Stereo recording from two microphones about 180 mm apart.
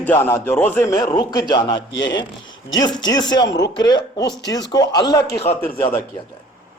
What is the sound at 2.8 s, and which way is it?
Speech, 25° left (ahead or behind).